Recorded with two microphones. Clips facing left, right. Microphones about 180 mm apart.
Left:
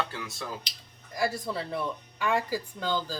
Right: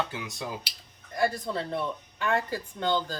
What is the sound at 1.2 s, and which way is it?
A man's voice, 5° left (ahead or behind).